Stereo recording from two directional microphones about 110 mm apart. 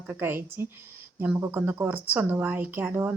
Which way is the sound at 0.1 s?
20° right (ahead or behind).